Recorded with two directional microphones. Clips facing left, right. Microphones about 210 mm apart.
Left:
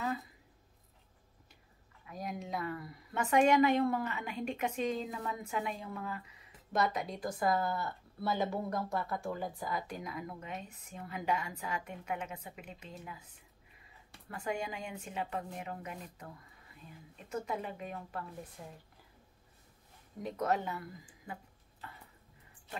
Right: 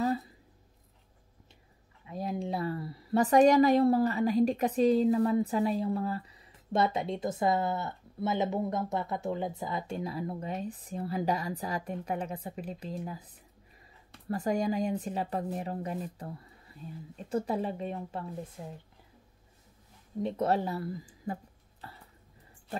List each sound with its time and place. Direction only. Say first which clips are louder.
2.0 s a woman's voice: right 7 dB; 30° right (ahead or behind)
20.2 s a woman's voice: right 5 dB; 30° right (ahead or behind)
21.8 s a sound: right 2 dB; 35° right (ahead or behind)